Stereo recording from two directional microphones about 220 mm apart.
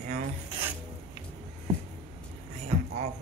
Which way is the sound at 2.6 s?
30° right (ahead or behind).